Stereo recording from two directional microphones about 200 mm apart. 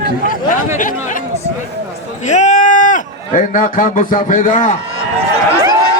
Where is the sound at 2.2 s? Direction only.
35° left (ahead or behind).